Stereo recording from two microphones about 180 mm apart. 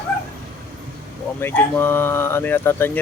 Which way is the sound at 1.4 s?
15° left (ahead or behind).